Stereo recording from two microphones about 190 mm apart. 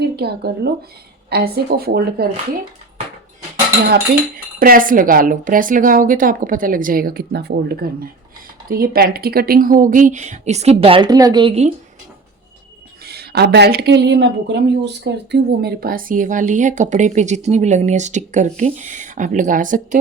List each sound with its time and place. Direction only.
0.2 s speech: 60° right (ahead or behind)
4.6 s a woman's voice: 50° right (ahead or behind); by 11.7 s 30° right (ahead or behind)
13.1 s speech: 55° right (ahead or behind)